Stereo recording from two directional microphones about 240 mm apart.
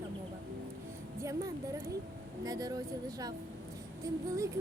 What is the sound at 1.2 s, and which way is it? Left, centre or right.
Music, centre.